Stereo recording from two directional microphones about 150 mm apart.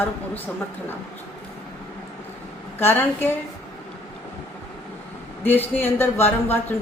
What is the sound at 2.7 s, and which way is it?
Speech, 15° left (ahead or behind).